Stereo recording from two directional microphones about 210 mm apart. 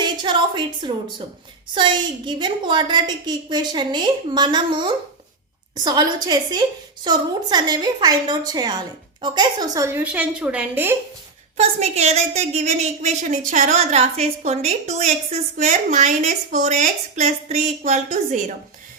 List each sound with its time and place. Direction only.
0.0 s a sound: 20° right (ahead or behind)
1.7 s a woman's voice: 20° right (ahead or behind)
11.5 s a woman's voice: 30° right (ahead or behind)